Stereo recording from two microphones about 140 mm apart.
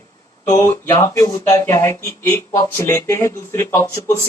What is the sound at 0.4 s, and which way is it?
Speech, 25° left (ahead or behind).